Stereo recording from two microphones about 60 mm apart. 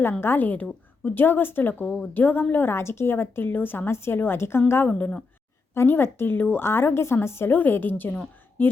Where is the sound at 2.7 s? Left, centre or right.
Left.